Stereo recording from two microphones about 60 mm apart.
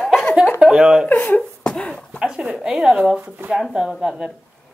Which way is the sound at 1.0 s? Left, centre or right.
Left.